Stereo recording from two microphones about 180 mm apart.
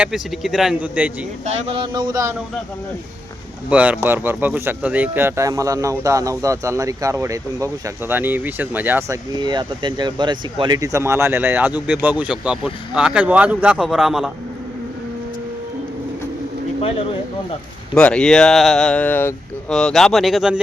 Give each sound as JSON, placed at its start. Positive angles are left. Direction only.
{"t": 0.0, "sound": "speech", "side_deg": 0}
{"t": 1.5, "sound": "speech", "side_deg": -35}
{"t": 3.7, "sound": "speech", "side_deg": -5}
{"t": 17.9, "sound": "speech", "side_deg": 5}